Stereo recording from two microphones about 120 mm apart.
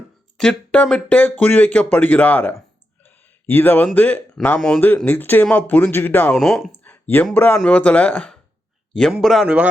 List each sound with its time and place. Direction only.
0.3 s speech: 10° left (ahead or behind)
6.3 s speech: centre (ahead or behind)
6.8 s a sound: 15° left (ahead or behind)
7.3 s speech: 10° left (ahead or behind)
9.1 s speech: centre (ahead or behind)